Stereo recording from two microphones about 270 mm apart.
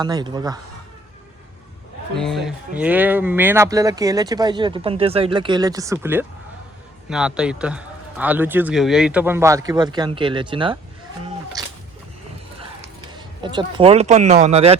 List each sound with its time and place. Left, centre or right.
0.0 s speech: centre
2.1 s speech: centre
13.1 s speech: centre